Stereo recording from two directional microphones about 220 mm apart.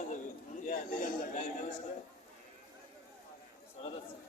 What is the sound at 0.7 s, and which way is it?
Speech, 35° left (ahead or behind).